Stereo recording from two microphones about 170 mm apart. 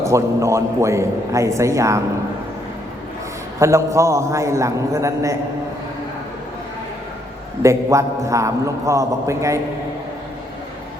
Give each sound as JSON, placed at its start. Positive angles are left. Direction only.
{"t": 0.0, "sound": "a man's voice", "side_deg": -15}
{"t": 3.6, "sound": "a man's voice", "side_deg": -15}
{"t": 7.6, "sound": "a man's voice", "side_deg": -15}